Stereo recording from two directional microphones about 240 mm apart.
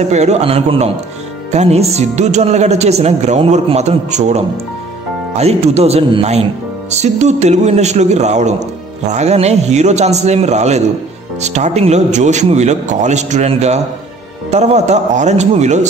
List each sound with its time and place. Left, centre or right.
0.1 s a man's voice: right